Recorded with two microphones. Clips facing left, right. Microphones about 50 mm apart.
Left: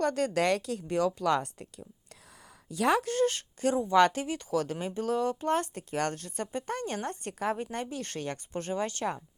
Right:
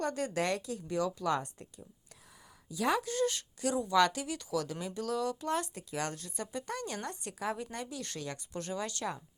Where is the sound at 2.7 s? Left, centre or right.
Left.